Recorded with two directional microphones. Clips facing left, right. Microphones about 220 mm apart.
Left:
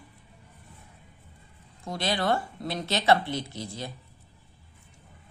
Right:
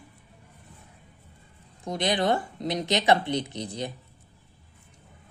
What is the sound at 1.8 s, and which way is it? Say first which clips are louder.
A woman's voice: right 3 dB; 20° right (ahead or behind).